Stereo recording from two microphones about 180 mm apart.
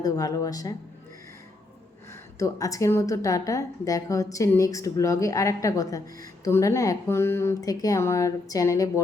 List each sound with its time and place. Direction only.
0.0 s speech: 20° left (ahead or behind)
2.4 s a woman's voice: 20° left (ahead or behind)